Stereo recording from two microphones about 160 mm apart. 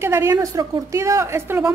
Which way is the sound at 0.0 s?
15° right (ahead or behind).